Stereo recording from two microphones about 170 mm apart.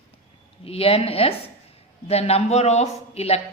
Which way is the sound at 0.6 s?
35° left (ahead or behind).